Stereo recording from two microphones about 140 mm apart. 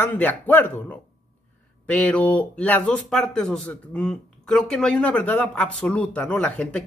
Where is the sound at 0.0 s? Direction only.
10° left (ahead or behind).